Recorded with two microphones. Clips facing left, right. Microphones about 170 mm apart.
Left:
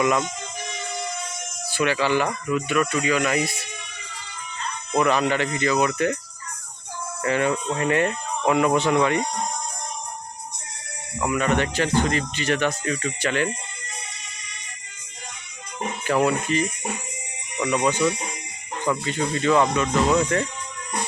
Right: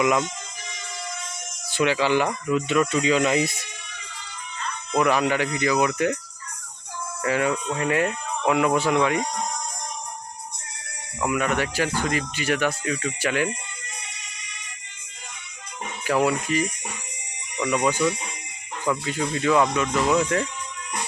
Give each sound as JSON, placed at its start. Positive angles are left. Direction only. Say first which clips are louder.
{"t": 0.0, "sound": "speech", "louder": "even", "side_deg": -15}
{"t": 1.7, "sound": "speech", "louder": "right 1 dB", "side_deg": -15}
{"t": 4.9, "sound": "speech", "louder": "even", "side_deg": -10}
{"t": 7.2, "sound": "speech", "louder": "left 1 dB", "side_deg": -5}
{"t": 11.2, "sound": "speech", "louder": "left 2 dB", "side_deg": -5}
{"t": 16.0, "sound": "speech", "louder": "even", "side_deg": -5}